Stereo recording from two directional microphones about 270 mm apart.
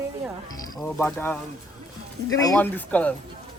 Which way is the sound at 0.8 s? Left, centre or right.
Centre.